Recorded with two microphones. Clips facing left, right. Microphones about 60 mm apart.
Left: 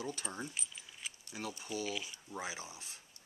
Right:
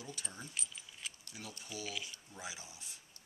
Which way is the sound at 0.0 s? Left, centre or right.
Left.